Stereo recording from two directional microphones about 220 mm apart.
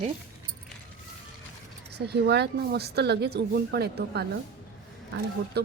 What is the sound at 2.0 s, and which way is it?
A woman's voice, 50° right (ahead or behind).